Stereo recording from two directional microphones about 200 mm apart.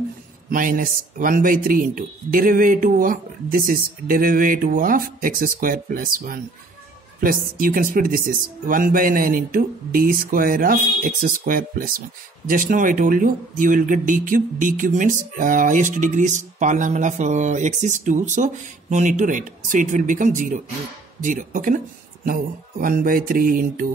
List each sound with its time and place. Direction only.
0.5 s speech: 45° right (ahead or behind)